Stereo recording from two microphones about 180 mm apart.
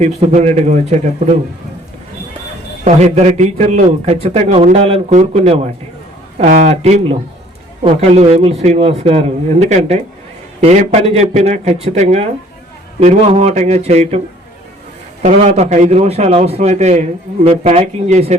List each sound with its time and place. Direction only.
0.0 s a man's voice: 40° right (ahead or behind)
2.8 s a man's voice: 40° right (ahead or behind)
15.2 s a man's voice: 40° right (ahead or behind)